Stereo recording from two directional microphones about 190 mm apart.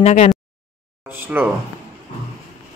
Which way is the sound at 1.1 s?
10° right (ahead or behind).